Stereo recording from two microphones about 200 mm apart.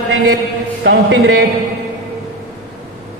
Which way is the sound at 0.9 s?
60° right (ahead or behind).